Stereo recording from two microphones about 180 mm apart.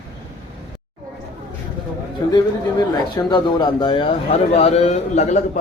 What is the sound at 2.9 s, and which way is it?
Speech, 25° left (ahead or behind).